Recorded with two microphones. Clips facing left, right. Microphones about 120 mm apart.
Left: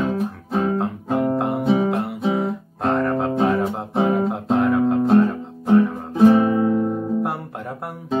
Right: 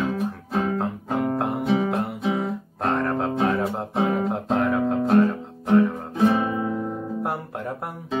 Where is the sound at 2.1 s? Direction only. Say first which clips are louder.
Left 3 dB; 30° left (ahead or behind).